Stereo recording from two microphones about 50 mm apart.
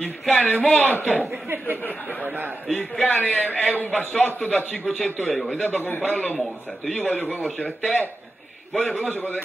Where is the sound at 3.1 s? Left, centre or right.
Left.